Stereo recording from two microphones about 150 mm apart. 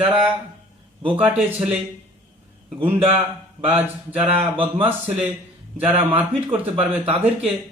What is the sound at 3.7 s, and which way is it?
Speech, 10° right (ahead or behind).